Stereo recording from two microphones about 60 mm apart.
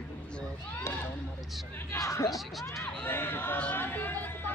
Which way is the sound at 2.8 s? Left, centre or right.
Left.